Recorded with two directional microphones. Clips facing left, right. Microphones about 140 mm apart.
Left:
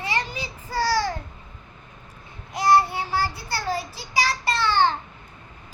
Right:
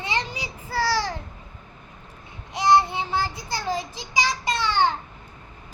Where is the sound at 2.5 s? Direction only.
20° right (ahead or behind).